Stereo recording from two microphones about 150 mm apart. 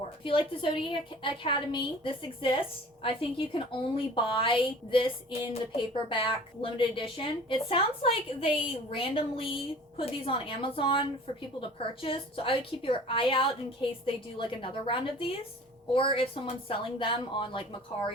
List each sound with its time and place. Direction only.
0.3 s a woman's voice: 35° left (ahead or behind)